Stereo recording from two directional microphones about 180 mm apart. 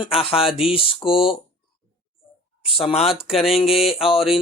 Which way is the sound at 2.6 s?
30° left (ahead or behind).